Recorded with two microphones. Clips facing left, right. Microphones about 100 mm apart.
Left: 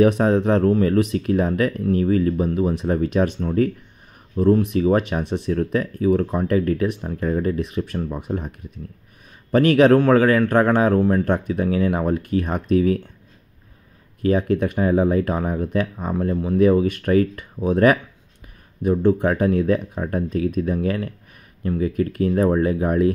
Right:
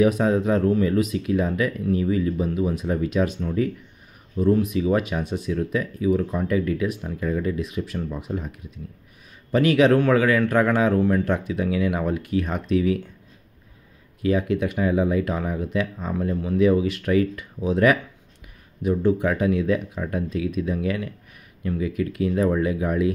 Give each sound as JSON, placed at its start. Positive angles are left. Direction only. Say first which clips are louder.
{"t": 0.3, "sound": "speech", "louder": "left 3 dB", "side_deg": 60}
{"t": 9.5, "sound": "speech", "louder": "left 3 dB", "side_deg": 45}
{"t": 14.2, "sound": "speech", "louder": "left 3 dB", "side_deg": 45}
{"t": 16.1, "sound": "speech", "louder": "left 3 dB", "side_deg": 35}